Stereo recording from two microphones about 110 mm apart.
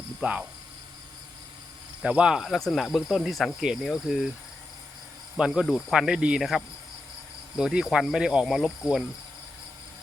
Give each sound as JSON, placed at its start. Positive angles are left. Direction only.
{"t": 0.2, "sound": "cricket", "side_deg": -10}
{"t": 2.0, "sound": "cricket", "side_deg": -10}
{"t": 5.4, "sound": "cricket", "side_deg": 0}